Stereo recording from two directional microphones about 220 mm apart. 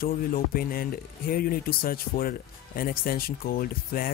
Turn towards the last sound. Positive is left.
turn(degrees=40)  # may be behind; listen again after turning